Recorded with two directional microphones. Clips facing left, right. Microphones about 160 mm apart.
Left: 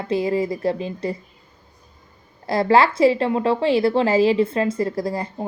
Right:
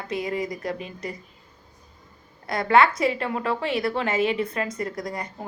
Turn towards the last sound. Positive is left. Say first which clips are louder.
# left 7 dB
turn(degrees=30)  # may be behind; listen again after turning